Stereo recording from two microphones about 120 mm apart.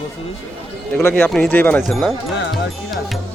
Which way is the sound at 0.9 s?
15° left (ahead or behind).